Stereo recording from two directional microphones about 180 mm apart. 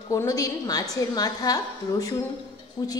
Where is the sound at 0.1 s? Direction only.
20° left (ahead or behind).